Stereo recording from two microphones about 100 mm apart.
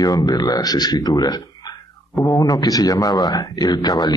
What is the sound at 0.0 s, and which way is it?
Speech, 40° left (ahead or behind).